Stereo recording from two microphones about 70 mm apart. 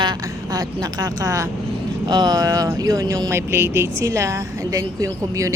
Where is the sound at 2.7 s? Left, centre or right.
Right.